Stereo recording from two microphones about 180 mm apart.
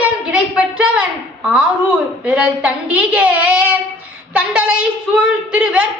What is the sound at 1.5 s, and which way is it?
Speech, 5° right (ahead or behind).